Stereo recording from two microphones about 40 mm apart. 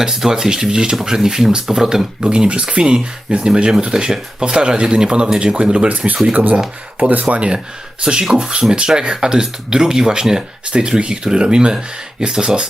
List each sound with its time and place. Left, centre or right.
0.0 s speech: centre
2.3 s speech: right
6.3 s speech: right
8.0 s speech: centre